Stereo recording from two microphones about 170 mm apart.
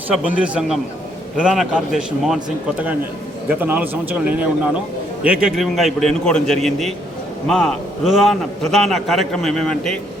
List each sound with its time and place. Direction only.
0.1 s a man's voice: 10° right (ahead or behind)